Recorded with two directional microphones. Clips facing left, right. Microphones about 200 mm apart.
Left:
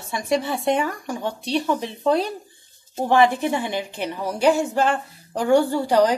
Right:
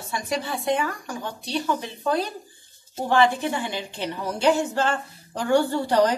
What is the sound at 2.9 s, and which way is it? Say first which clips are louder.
A woman's voice: left 3 dB; 20° left (ahead or behind).